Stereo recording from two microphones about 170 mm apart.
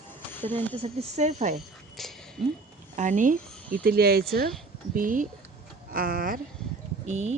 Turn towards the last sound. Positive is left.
turn(degrees=-45)  # may be behind; listen again after turning